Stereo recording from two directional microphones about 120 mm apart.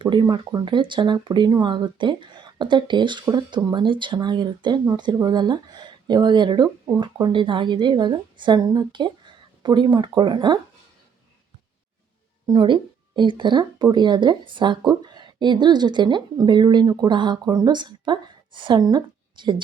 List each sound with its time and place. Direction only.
0.0 s speech: 40° right (ahead or behind)
12.5 s speech: 40° right (ahead or behind)